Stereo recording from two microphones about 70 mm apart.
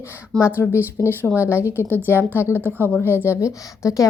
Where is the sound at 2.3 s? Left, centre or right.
Left.